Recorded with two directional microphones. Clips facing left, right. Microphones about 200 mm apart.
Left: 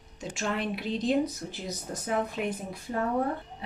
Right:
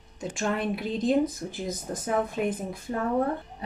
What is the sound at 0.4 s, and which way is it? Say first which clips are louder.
Speech: right 3 dB; 50° right (ahead or behind).